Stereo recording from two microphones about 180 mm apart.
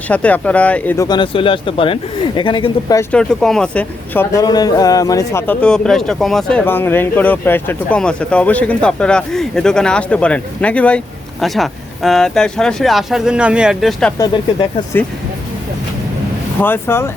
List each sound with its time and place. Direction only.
0.1 s speech: 10° left (ahead or behind)
1.0 s speech: 25° left (ahead or behind)
3.0 s speech: 5° left (ahead or behind)
16.6 s speech: 10° left (ahead or behind)